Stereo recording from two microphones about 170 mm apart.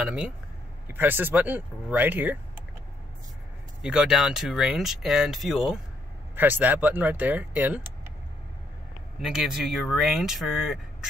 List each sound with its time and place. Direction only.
0.0 s speech: 5° right (ahead or behind)
3.8 s speech: 5° right (ahead or behind)
9.2 s speech: centre (ahead or behind)